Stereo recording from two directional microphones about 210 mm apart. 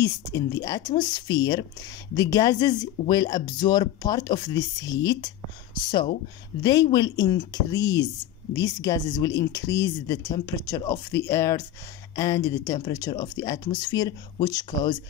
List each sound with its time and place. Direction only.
0.0 s speech: 15° left (ahead or behind)